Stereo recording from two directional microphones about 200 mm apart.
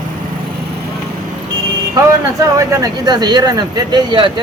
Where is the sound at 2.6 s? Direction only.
15° right (ahead or behind).